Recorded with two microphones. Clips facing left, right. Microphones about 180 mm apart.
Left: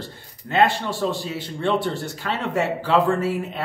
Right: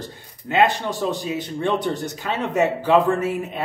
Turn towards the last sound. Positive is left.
turn(degrees=-20)  # may be behind; listen again after turning